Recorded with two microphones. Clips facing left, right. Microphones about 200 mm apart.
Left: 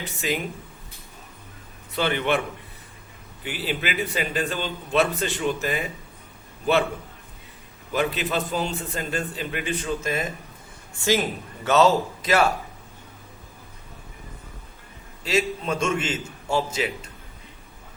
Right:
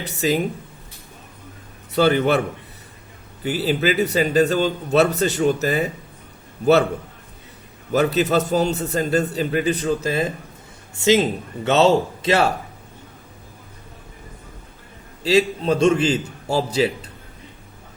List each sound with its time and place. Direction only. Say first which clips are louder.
0.2 s speech: right 7 dB; 35° right (ahead or behind)
2.0 s speech: right 7 dB; 40° right (ahead or behind)
3.4 s speech: right 9 dB; 40° right (ahead or behind)
7.9 s a man's voice: right 7 dB; 40° right (ahead or behind)
15.2 s speech: right 7 dB; 30° right (ahead or behind)